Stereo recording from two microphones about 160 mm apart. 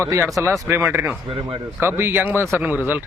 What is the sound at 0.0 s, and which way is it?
Speech, 15° right (ahead or behind).